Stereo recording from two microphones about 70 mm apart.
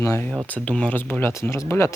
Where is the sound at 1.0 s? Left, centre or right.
Left.